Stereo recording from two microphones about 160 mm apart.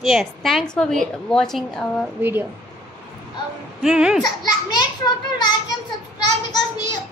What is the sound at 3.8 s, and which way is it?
Speech, 5° right (ahead or behind).